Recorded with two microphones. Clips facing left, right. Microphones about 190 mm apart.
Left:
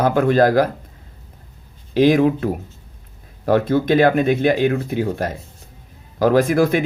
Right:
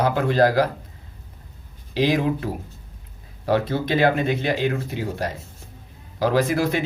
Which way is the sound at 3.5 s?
50° left (ahead or behind).